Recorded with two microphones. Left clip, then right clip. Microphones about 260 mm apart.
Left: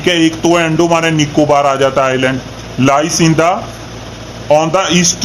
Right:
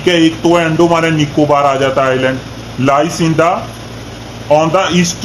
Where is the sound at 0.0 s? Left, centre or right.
Left.